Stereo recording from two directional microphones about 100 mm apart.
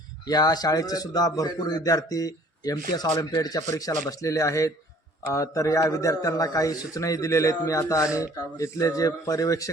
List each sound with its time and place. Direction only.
0.3 s a man's voice: 40° left (ahead or behind)